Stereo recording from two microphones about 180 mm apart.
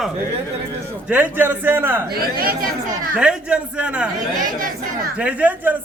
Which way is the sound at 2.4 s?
55° right (ahead or behind).